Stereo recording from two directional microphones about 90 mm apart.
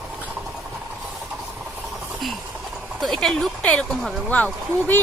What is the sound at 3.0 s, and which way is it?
Speech, 5° left (ahead or behind).